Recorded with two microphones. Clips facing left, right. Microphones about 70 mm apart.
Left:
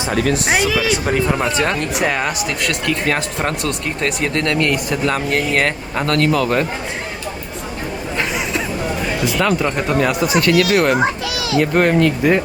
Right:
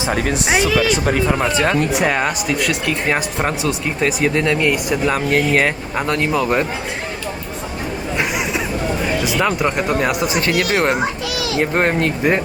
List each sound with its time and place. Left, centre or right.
0.0 s speech: centre
0.3 s speech: centre
6.1 s speech: centre
8.2 s hubbub: centre
9.2 s speech: centre
10.2 s a child's voice: right